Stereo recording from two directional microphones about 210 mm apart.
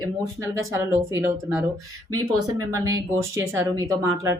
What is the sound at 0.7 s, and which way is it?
Speech, 15° right (ahead or behind).